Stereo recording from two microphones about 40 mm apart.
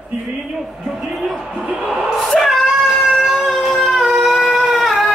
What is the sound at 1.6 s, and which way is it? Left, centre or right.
Speech, right.